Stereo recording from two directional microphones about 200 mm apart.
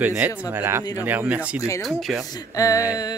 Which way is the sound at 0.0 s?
10° right (ahead or behind).